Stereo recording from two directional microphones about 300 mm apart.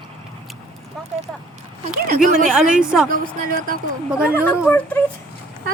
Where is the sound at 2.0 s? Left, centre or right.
Right.